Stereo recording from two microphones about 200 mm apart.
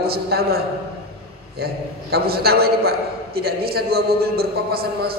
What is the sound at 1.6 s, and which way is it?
A man's voice, 50° right (ahead or behind).